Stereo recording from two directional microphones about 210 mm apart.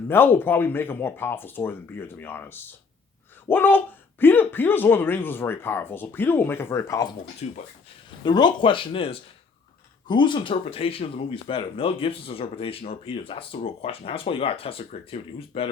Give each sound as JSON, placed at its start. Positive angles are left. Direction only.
{"t": 0.1, "sound": "speech", "side_deg": 10}
{"t": 7.4, "sound": "speech", "side_deg": 30}
{"t": 8.2, "sound": "speech", "side_deg": 20}